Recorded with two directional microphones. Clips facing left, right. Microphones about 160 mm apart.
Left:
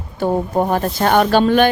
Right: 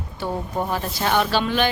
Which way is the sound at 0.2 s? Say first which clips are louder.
Left 9 dB; 50° left (ahead or behind).